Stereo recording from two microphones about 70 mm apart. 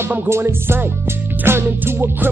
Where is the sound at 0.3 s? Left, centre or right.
Right.